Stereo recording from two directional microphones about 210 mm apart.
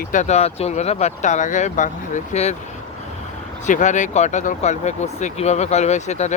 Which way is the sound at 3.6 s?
35° left (ahead or behind).